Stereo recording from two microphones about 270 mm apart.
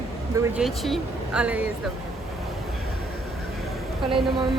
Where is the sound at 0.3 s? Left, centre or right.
Centre.